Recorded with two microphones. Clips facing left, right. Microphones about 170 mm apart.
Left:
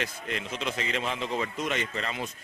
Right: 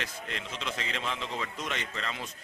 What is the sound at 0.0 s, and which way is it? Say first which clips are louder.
A man's voice: left 5 dB; 10° left (ahead or behind).